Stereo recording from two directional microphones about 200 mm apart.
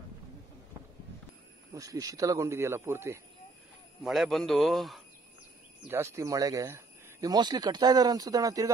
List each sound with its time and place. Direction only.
1.7 s speech: 15° right (ahead or behind)
4.0 s a man's voice: centre (ahead or behind)
5.9 s speech: 15° right (ahead or behind)